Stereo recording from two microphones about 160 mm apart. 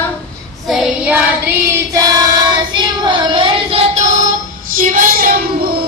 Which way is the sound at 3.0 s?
30° right (ahead or behind).